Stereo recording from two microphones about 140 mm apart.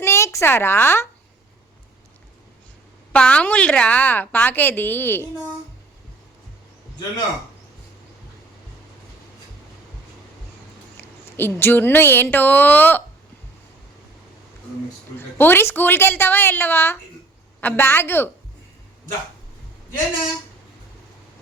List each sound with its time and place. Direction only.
0.0 s a woman's voice: 20° left (ahead or behind)
3.1 s a woman's voice: 10° left (ahead or behind)
11.3 s a woman's voice: 15° left (ahead or behind)
15.4 s a woman's voice: 15° left (ahead or behind)